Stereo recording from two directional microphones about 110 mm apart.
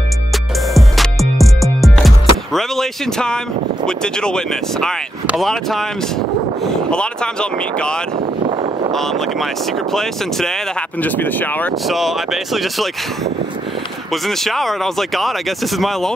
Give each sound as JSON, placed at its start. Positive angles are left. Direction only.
{"t": 0.7, "sound": "music", "side_deg": 0}
{"t": 3.8, "sound": "speech", "side_deg": 5}
{"t": 11.0, "sound": "speech", "side_deg": 15}
{"t": 11.9, "sound": "speech", "side_deg": 0}